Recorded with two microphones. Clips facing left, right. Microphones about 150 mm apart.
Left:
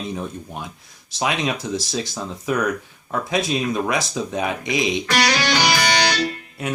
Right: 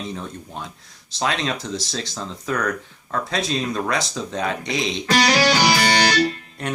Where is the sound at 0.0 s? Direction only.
10° left (ahead or behind).